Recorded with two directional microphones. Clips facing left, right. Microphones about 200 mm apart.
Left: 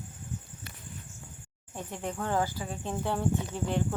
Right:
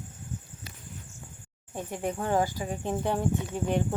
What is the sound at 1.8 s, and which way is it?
Speech, 15° right (ahead or behind).